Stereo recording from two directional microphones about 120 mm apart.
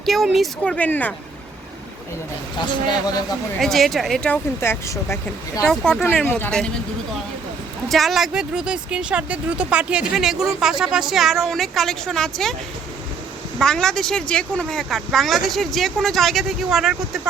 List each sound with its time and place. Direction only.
0.0 s speech: centre (ahead or behind)
3.6 s speech: centre (ahead or behind)
4.6 s speech: 20° left (ahead or behind)
5.6 s speech: 5° left (ahead or behind)
7.9 s speech: centre (ahead or behind)
13.6 s speech: 5° left (ahead or behind)